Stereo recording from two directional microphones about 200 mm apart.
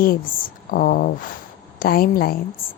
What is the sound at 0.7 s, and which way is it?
Speech, 45° left (ahead or behind).